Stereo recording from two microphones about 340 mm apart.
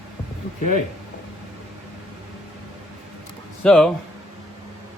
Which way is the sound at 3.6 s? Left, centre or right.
Centre.